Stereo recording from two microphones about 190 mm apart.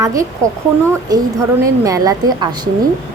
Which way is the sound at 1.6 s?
15° right (ahead or behind).